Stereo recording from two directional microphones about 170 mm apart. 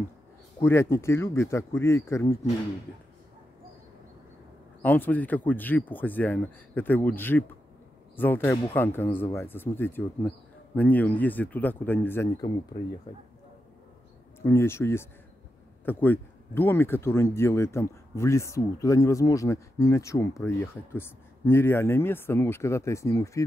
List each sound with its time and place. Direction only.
0.6 s speech: 15° left (ahead or behind)
4.8 s speech: 10° left (ahead or behind)
14.4 s speech: 15° left (ahead or behind)